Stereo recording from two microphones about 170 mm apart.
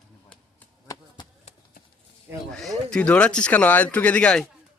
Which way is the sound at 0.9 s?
25° left (ahead or behind).